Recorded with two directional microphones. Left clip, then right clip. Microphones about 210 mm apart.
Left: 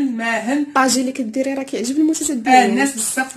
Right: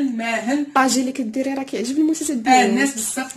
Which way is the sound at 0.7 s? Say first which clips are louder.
Left 1 dB; centre (ahead or behind).